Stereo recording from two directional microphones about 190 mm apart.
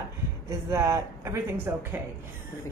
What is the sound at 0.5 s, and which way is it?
A woman's voice, 15° right (ahead or behind).